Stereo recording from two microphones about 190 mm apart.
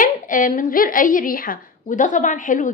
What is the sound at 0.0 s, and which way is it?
A woman's voice, 45° left (ahead or behind).